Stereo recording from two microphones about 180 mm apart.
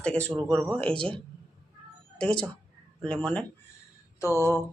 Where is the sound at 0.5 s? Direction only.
5° right (ahead or behind).